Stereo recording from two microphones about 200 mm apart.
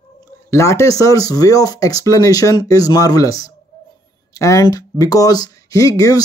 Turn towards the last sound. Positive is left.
turn(degrees=15)  # may be behind; listen again after turning